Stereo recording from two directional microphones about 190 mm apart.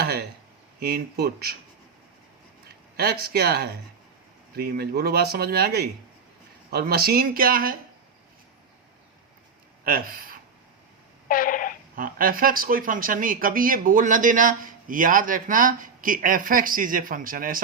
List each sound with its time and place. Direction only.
0.0 s a sound: 55° right (ahead or behind)
0.8 s speech: 55° right (ahead or behind)
3.0 s speech: 55° right (ahead or behind)
9.8 s speech: 50° right (ahead or behind)
11.3 s a sound: 45° left (ahead or behind)
11.9 s speech: 50° right (ahead or behind)